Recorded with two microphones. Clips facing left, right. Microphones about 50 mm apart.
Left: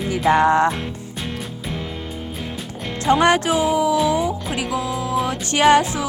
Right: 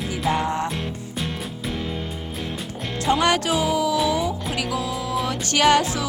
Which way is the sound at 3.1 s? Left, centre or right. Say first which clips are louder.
Left 5 dB; left.